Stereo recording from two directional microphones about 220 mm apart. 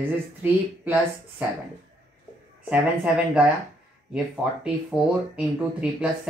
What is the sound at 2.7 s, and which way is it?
Speech, 5° right (ahead or behind).